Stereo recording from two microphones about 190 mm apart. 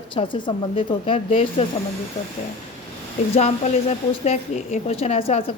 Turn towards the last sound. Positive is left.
turn(degrees=30)  # may be behind; listen again after turning